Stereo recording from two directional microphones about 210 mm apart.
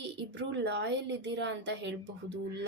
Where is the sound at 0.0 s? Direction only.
55° right (ahead or behind).